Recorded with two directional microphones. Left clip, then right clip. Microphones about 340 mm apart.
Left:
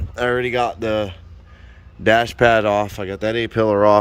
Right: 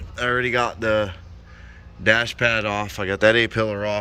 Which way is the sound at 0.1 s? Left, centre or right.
Centre.